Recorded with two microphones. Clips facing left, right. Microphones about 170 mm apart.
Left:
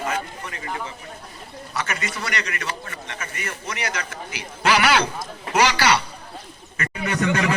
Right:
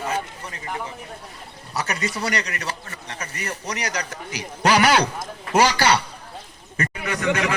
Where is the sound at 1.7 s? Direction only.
35° right (ahead or behind).